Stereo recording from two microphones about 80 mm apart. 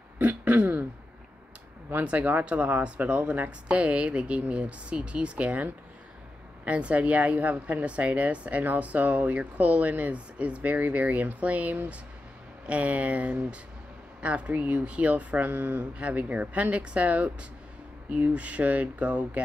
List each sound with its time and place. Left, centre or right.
0.2 s throat clearing: right
2.0 s a woman's voice: centre